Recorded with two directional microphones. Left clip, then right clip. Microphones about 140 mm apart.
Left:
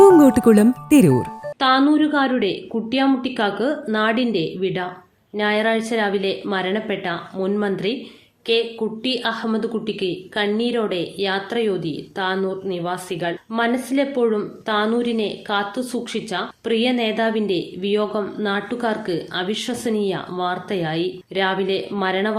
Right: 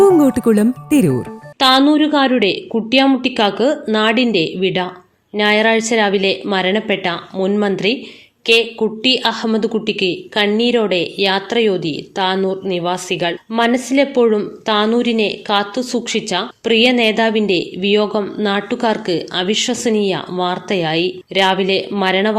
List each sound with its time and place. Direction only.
0.0 s speech: centre (ahead or behind)
1.6 s a woman's voice: 10° right (ahead or behind)